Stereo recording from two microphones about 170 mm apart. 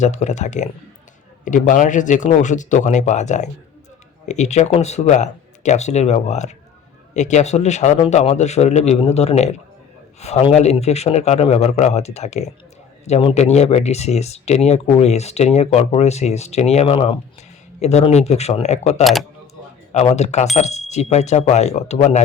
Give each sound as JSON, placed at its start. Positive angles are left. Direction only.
{"t": 0.0, "sound": "speech", "side_deg": 45}